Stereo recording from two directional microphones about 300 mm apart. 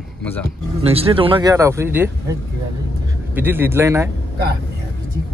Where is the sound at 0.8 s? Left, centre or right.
Centre.